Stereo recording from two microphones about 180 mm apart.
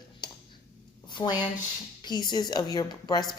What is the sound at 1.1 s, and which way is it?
A woman's voice, 25° left (ahead or behind).